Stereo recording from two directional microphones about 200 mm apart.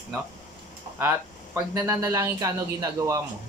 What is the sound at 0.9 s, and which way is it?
Speech, 15° right (ahead or behind).